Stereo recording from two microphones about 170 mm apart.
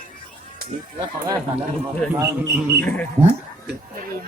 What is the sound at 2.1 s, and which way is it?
Speech, 15° right (ahead or behind).